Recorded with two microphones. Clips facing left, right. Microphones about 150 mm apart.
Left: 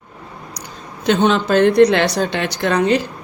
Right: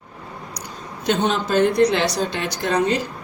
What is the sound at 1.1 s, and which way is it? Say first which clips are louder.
A woman's voice: left 5 dB; 80° left.